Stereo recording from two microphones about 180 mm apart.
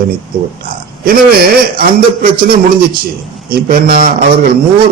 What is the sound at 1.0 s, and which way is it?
A man's voice, 55° right (ahead or behind).